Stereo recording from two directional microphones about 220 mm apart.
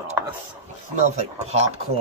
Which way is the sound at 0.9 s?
30° right (ahead or behind).